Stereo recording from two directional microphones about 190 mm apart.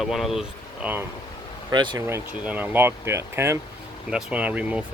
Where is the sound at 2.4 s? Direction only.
10° right (ahead or behind).